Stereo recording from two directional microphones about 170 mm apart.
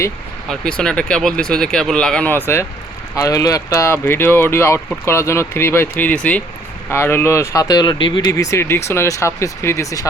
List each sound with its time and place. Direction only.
0.4 s speech: 5° left (ahead or behind)